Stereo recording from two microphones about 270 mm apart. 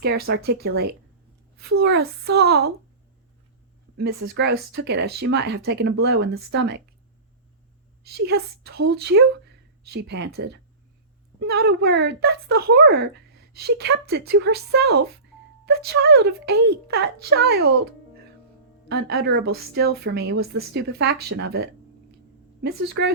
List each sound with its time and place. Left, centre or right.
0.0 s a woman's voice: right
1.7 s a woman's voice: right
4.4 s a woman's voice: right
8.0 s a woman's voice: right
18.9 s a woman's voice: right